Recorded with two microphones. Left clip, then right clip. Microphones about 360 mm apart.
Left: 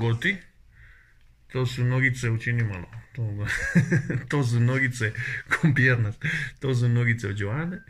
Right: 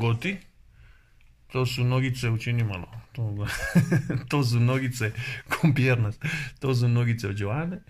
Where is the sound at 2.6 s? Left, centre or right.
Centre.